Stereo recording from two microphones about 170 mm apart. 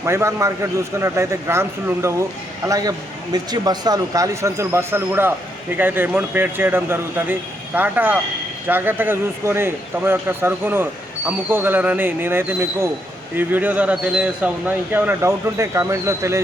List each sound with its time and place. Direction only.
0.0 s speech: 15° right (ahead or behind)